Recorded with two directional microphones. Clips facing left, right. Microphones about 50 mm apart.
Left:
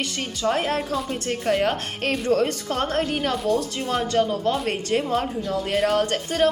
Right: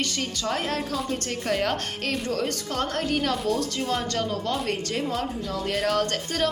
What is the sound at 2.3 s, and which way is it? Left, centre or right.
Speech, left.